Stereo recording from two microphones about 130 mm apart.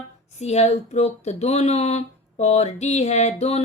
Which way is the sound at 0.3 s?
55° left (ahead or behind).